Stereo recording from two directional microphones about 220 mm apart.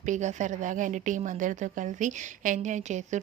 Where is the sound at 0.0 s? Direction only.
35° right (ahead or behind).